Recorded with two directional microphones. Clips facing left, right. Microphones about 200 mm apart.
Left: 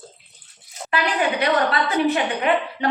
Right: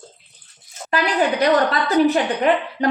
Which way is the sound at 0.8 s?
40° right (ahead or behind).